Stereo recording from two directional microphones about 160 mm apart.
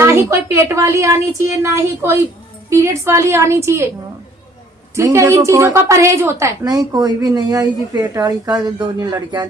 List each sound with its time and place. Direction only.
0.0 s a woman's voice: 15° right (ahead or behind)
4.9 s a woman's voice: 20° right (ahead or behind)